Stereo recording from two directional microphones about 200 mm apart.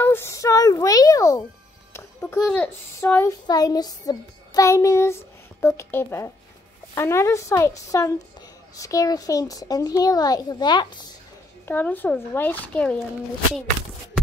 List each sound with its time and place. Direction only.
0.0 s a sound: 10° left (ahead or behind)
2.0 s a child's voice: 10° left (ahead or behind)
11.6 s a child's voice: 10° left (ahead or behind)